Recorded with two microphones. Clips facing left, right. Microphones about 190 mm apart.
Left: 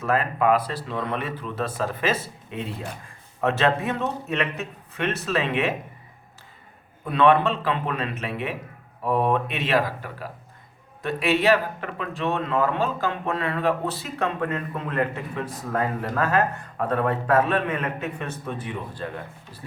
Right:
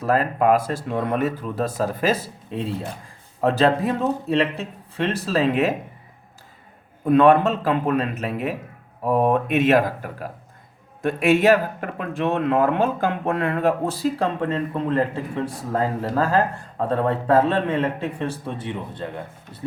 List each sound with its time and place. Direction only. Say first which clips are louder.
0.0 s a man's voice: right 3 dB; 40° right (ahead or behind)
7.1 s a man's voice: right 4 dB; 45° right (ahead or behind)
14.2 s a man's voice: right 3 dB; 30° right (ahead or behind)